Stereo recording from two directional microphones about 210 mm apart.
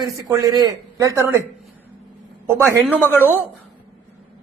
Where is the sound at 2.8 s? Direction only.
10° left (ahead or behind).